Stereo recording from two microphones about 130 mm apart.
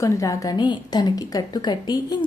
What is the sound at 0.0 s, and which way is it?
A woman's voice, 25° left (ahead or behind).